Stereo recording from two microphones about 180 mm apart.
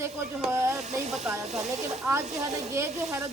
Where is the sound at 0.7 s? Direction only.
Centre (ahead or behind).